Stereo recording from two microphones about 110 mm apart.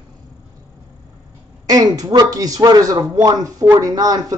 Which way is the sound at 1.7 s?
35° right (ahead or behind).